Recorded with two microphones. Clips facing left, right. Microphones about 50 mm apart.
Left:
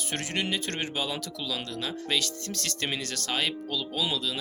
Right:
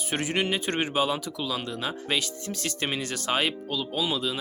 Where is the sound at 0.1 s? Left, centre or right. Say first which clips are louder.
Right 4 dB; centre.